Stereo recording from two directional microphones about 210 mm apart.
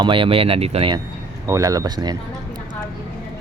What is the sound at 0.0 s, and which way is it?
Speech, 25° right (ahead or behind).